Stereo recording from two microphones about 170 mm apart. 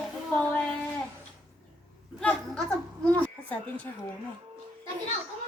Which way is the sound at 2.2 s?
5° left (ahead or behind).